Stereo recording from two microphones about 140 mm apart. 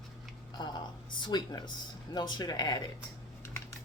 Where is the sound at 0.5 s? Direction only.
30° left (ahead or behind).